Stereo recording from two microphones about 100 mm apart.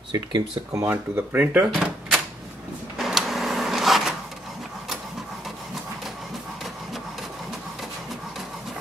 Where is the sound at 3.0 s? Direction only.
Centre (ahead or behind).